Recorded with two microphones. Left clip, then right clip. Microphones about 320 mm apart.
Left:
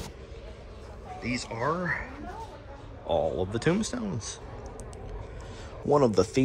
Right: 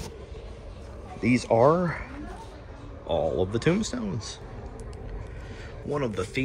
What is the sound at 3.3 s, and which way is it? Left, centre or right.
Speech, centre.